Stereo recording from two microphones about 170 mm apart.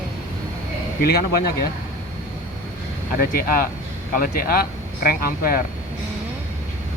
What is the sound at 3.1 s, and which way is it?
Speech, 60° left (ahead or behind).